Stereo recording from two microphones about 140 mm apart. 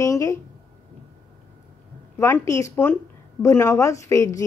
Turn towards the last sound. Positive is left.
turn(degrees=20)  # may be behind; listen again after turning